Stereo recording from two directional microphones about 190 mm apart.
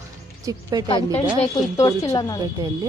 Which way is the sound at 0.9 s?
30° left (ahead or behind).